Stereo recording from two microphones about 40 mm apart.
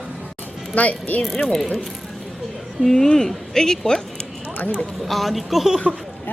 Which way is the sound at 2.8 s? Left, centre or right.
Centre.